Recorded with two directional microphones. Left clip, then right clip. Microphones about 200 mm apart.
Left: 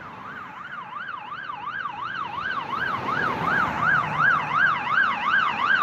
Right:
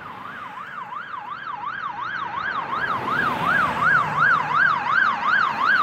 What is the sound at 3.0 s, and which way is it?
Emergency vehicle, 45° right (ahead or behind).